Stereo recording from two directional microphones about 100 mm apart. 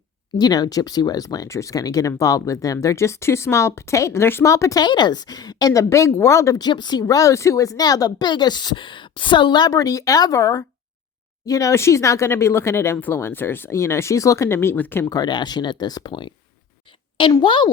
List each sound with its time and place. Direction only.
0.3 s speech: 40° left (ahead or behind)
6.6 s a woman's voice: 45° left (ahead or behind); by 15.0 s 20° left (ahead or behind)
15.0 s a woman's voice: 45° left (ahead or behind)
17.4 s a woman's voice: 55° left (ahead or behind)